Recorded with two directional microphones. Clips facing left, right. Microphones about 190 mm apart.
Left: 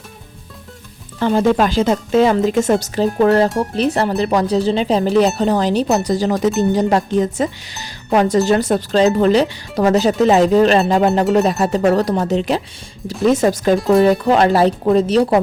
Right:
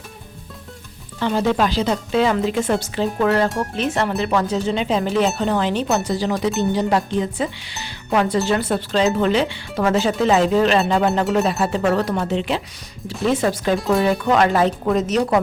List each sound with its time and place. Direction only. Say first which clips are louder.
1.2 s speech: left 4 dB; 50° left (ahead or behind)
13.7 s speech: left 5 dB; centre (ahead or behind)
14.0 s speech: left 4 dB; 35° left (ahead or behind)